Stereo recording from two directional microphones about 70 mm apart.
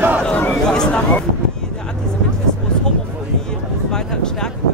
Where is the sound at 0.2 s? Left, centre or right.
Centre.